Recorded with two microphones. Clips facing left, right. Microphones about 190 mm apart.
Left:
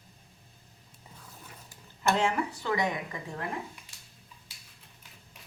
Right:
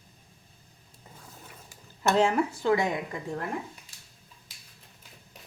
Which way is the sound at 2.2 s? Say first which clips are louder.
Right 5 dB; 40° right (ahead or behind).